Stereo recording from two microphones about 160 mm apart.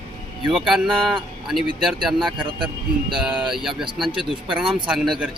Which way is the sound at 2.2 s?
30° right (ahead or behind).